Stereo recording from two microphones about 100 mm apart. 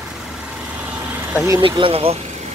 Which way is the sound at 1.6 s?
70° right (ahead or behind).